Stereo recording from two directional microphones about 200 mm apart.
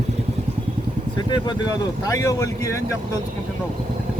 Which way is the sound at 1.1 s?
20° left (ahead or behind).